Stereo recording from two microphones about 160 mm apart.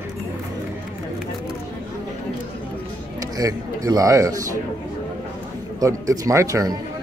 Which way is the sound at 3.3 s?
20° right (ahead or behind).